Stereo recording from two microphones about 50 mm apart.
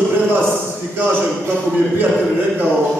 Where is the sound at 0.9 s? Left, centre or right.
Right.